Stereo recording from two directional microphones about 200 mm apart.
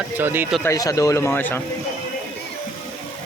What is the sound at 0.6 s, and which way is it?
Speech, 15° left (ahead or behind).